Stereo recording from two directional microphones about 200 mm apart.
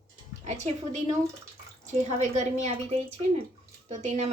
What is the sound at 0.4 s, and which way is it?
Speech, 35° right (ahead or behind).